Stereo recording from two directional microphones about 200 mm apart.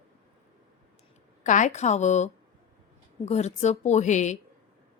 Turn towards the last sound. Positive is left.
turn(degrees=35)  # may be behind; listen again after turning